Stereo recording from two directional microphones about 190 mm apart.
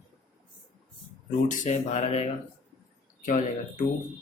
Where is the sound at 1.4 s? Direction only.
40° left (ahead or behind).